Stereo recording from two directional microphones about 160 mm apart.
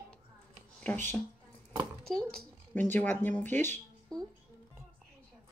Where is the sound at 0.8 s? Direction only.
10° left (ahead or behind).